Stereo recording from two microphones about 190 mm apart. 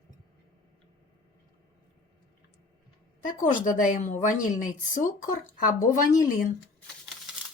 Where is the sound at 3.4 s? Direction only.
40° left (ahead or behind).